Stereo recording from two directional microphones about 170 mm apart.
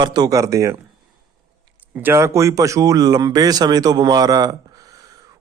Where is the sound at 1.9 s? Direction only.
15° right (ahead or behind).